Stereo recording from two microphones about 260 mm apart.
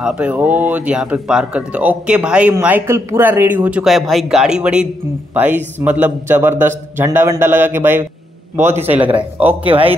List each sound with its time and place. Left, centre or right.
0.0 s a man's voice: centre
9.7 s speech: right